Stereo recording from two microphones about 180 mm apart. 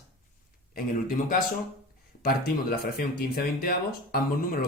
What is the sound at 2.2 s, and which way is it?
Speech, 55° left (ahead or behind).